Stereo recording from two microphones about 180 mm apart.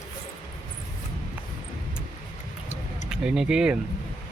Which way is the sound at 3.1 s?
5° right (ahead or behind).